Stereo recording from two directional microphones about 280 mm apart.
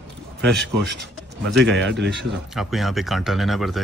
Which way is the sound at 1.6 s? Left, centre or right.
Right.